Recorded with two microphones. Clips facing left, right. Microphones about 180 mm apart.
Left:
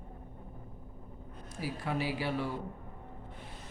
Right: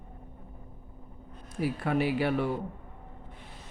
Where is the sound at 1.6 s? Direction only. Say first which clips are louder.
Right 7 dB; 60° right (ahead or behind).